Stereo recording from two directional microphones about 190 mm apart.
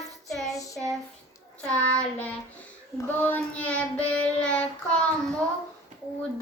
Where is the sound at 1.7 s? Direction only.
5° left (ahead or behind).